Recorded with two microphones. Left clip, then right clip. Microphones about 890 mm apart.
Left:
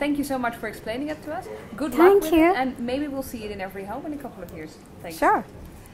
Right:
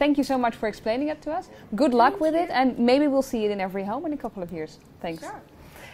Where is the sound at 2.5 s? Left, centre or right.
Right.